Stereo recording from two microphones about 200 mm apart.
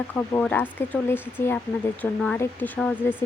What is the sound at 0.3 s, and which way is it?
Speech, 10° left (ahead or behind).